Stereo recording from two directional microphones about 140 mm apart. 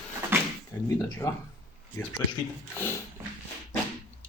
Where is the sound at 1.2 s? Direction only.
25° left (ahead or behind).